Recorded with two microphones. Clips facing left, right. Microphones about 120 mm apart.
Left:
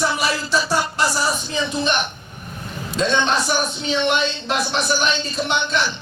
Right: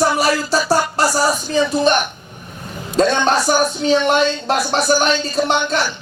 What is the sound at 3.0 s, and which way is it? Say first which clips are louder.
A man's voice: right 5 dB; 40° right (ahead or behind).